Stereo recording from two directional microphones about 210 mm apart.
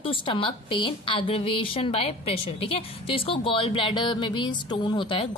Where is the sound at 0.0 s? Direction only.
25° left (ahead or behind).